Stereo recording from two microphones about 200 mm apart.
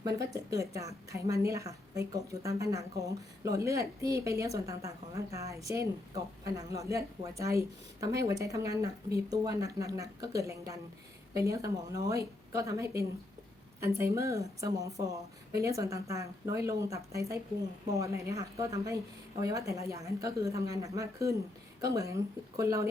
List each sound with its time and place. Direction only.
0.0 s a woman's voice: 15° right (ahead or behind)